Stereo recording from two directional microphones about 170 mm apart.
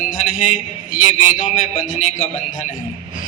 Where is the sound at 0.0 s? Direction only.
50° left (ahead or behind).